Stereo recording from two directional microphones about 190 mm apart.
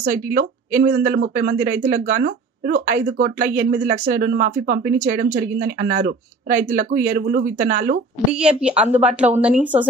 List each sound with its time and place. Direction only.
0.0 s speech: 50° right (ahead or behind)
8.3 s a woman's voice: 5° right (ahead or behind)